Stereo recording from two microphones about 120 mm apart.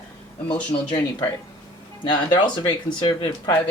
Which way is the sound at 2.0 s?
40° left (ahead or behind).